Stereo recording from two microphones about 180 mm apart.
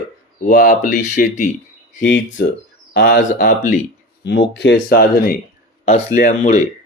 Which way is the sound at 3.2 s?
50° left (ahead or behind).